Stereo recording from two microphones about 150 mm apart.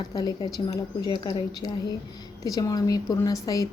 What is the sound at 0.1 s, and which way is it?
Speech, 25° left (ahead or behind).